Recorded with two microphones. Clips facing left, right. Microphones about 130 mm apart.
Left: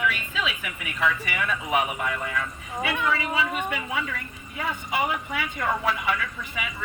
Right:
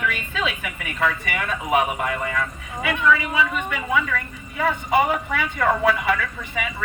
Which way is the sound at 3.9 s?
75° right (ahead or behind).